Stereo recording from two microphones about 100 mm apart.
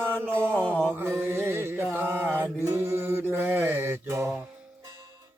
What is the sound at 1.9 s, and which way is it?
Mantra, 20° right (ahead or behind).